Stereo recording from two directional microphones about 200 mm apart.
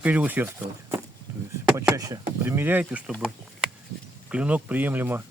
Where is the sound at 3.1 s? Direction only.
Centre (ahead or behind).